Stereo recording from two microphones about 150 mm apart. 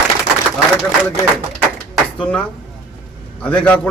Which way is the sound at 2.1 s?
5° left (ahead or behind).